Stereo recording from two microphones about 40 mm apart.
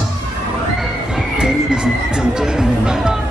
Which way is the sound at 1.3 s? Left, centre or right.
Centre.